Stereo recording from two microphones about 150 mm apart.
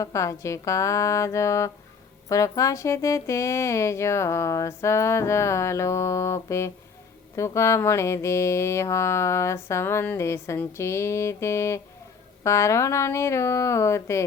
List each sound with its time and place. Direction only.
0.0 s mantra: 20° left (ahead or behind)